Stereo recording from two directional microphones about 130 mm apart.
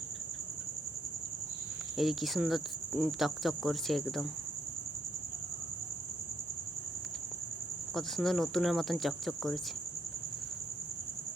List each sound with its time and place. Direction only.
2.0 s cricket: centre (ahead or behind)
7.9 s cricket: centre (ahead or behind)